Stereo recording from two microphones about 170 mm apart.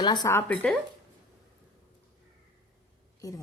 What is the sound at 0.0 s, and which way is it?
Speech, 25° left (ahead or behind).